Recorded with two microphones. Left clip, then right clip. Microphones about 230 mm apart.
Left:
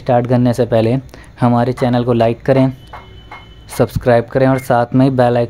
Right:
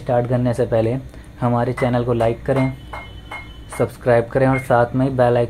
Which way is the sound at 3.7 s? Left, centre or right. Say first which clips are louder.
Left 4 dB; left.